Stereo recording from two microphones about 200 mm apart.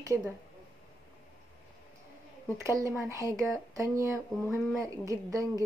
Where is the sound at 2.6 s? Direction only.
15° right (ahead or behind).